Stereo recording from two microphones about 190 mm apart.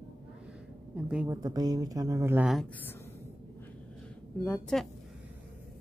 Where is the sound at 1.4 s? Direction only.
20° right (ahead or behind).